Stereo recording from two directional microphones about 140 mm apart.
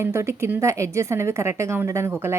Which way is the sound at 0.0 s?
20° right (ahead or behind).